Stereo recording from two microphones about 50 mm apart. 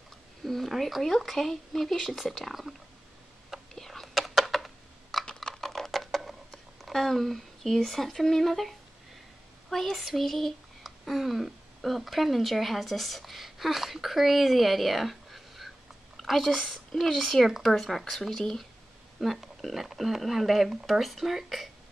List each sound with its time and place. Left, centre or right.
0.5 s speech: centre
3.7 s whispering: centre
4.1 s typing: centre
5.2 s computer keyboard: centre
5.5 s a sound: centre
9.7 s speech: centre